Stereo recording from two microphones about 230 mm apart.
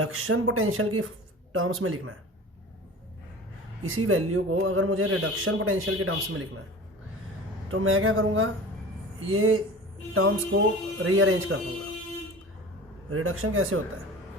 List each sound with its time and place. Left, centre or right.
0.0 s speech: right
3.8 s speech: right
7.7 s speech: right
13.1 s speech: right